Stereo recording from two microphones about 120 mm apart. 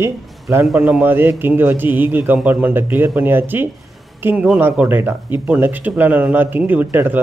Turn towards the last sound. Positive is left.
turn(degrees=-15)  # may be behind; listen again after turning